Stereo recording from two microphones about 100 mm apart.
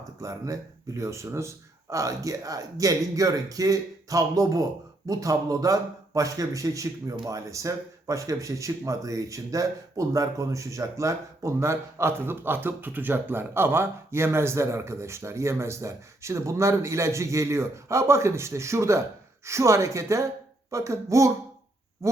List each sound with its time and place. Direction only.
0.2 s speech: 35° right (ahead or behind)